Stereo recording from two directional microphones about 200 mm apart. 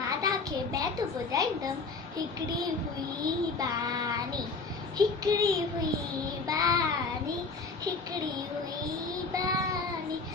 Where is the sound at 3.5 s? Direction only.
15° right (ahead or behind).